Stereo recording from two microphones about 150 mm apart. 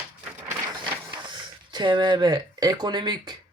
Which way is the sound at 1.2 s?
30° right (ahead or behind).